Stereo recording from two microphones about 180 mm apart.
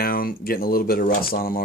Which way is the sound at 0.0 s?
55° left (ahead or behind).